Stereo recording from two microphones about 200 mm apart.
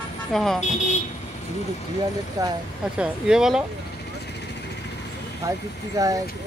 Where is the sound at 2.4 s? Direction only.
20° right (ahead or behind).